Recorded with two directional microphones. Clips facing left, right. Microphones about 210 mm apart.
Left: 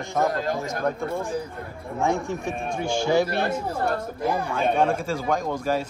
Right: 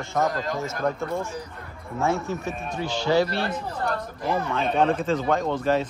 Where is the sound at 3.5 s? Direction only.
30° left (ahead or behind).